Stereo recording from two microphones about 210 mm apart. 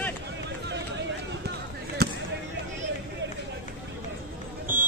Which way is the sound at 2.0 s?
50° right (ahead or behind).